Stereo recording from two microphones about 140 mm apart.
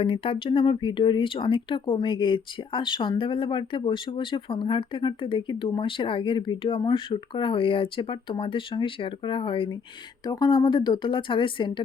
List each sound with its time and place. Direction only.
0.0 s speech: 40° left (ahead or behind)